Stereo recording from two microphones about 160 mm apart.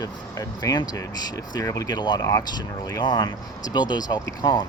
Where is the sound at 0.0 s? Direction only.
20° left (ahead or behind).